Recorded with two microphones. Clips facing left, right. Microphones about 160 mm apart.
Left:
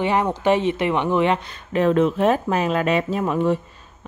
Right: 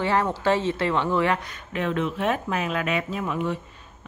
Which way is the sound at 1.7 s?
35° left (ahead or behind).